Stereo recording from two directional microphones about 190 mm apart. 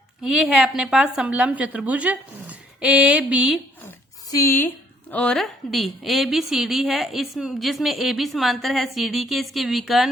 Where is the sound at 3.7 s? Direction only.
15° left (ahead or behind).